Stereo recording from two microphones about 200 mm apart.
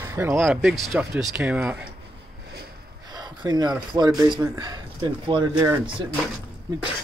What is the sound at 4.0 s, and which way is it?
Speech, 20° right (ahead or behind).